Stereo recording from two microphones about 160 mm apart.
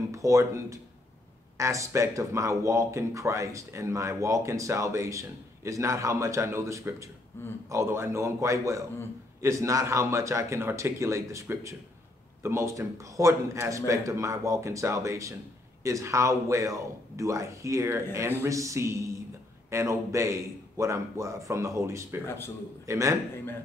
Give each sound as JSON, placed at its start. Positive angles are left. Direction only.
{"t": 0.1, "sound": "speech", "side_deg": -20}
{"t": 7.3, "sound": "speech", "side_deg": 15}
{"t": 7.7, "sound": "a man's voice", "side_deg": -15}
{"t": 22.2, "sound": "speech", "side_deg": 15}
{"t": 22.8, "sound": "speech", "side_deg": -20}